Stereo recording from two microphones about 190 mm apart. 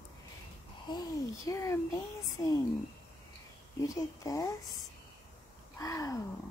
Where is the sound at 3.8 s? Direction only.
15° left (ahead or behind).